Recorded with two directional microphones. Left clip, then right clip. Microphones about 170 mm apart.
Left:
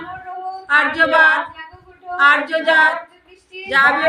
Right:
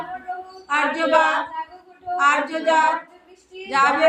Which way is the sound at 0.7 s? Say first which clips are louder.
Left 4 dB; 15° left (ahead or behind).